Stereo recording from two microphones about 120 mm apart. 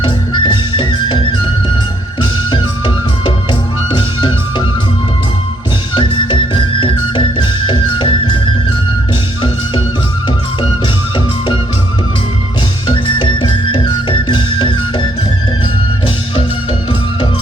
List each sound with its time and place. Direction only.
0.0 s music: 40° left (ahead or behind)
2.5 s music: 40° left (ahead or behind)
5.9 s music: 40° left (ahead or behind)
12.9 s music: 45° left (ahead or behind)